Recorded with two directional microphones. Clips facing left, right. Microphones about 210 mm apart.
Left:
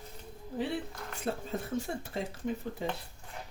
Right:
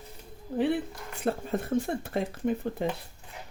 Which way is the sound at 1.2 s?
60° right (ahead or behind).